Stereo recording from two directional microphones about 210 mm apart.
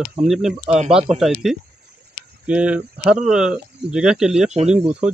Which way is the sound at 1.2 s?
Centre (ahead or behind).